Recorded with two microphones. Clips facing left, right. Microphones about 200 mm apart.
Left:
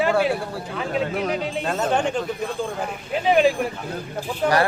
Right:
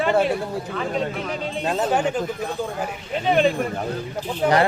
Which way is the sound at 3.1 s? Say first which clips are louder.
Left 1 dB; 5° left (ahead or behind).